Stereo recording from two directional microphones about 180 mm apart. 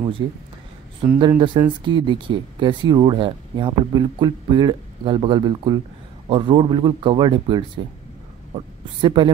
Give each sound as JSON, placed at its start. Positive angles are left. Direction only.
{"t": 0.2, "sound": "speech", "side_deg": -25}
{"t": 1.6, "sound": "speech", "side_deg": -20}